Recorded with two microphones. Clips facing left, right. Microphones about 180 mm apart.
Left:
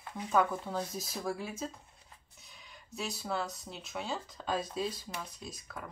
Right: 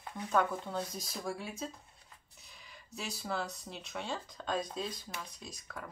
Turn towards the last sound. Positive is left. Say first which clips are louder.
# left 2 dB
turn(degrees=0)  # may be behind; listen again after turning